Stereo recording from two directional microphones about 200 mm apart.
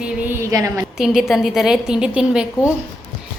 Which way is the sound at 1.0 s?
Centre (ahead or behind).